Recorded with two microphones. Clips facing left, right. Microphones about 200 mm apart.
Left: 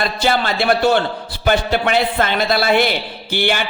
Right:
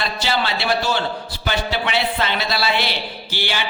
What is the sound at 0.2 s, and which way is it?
A man's voice, 50° left (ahead or behind).